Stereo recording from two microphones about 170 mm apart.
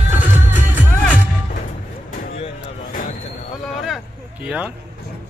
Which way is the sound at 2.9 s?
55° left (ahead or behind).